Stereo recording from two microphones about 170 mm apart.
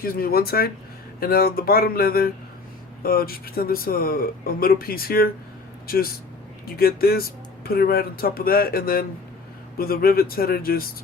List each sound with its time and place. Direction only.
0.0 s speech: 60° left (ahead or behind)